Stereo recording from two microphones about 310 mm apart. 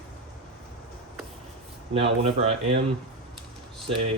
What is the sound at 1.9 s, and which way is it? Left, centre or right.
Speech, centre.